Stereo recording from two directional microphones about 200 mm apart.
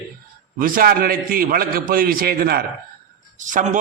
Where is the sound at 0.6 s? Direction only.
45° right (ahead or behind).